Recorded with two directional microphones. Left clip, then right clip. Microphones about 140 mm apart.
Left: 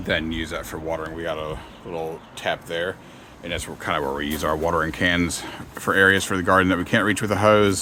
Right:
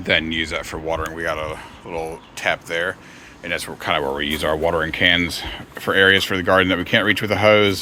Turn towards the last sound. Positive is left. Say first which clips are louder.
# right 3 dB
turn(degrees=20)  # may be behind; listen again after turning